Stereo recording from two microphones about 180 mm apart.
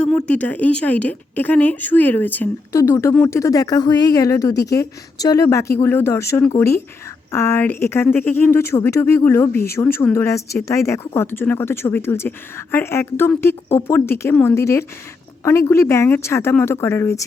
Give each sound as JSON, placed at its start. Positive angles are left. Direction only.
{"t": 0.0, "sound": "speech", "side_deg": 5}